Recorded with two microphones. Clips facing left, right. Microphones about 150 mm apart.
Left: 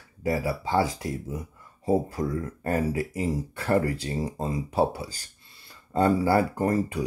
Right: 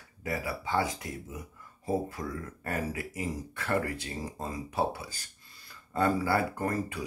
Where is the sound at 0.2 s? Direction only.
30° left (ahead or behind).